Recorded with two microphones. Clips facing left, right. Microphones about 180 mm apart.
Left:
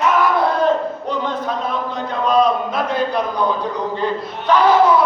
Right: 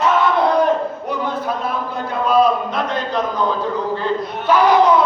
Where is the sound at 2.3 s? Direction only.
5° right (ahead or behind).